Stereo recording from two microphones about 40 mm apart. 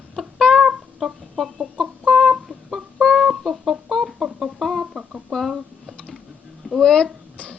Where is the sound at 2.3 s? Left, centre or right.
Centre.